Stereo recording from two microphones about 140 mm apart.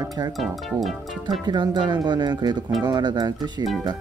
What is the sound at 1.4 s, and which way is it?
Speech, 30° right (ahead or behind).